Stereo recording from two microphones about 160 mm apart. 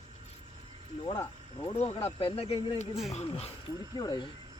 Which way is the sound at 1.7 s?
45° left (ahead or behind).